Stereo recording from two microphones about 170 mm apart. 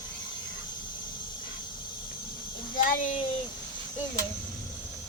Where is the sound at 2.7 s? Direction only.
50° left (ahead or behind).